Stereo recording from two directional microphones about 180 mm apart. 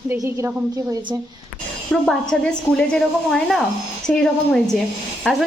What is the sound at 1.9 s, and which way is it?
A woman's voice, centre (ahead or behind).